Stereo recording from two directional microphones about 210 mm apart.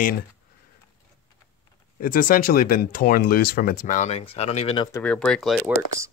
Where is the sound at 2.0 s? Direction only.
40° left (ahead or behind).